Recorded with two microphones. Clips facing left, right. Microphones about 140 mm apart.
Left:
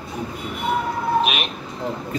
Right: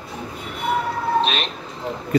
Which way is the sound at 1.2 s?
10° left (ahead or behind).